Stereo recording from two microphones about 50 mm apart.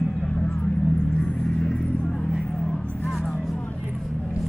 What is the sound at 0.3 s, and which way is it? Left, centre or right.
Vehicle, centre.